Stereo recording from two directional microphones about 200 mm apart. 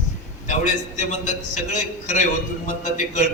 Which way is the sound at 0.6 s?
40° left (ahead or behind).